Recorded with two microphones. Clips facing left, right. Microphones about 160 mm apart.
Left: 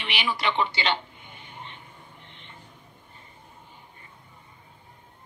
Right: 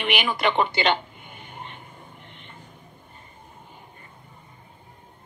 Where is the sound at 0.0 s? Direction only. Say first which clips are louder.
Right 5 dB; 50° right (ahead or behind).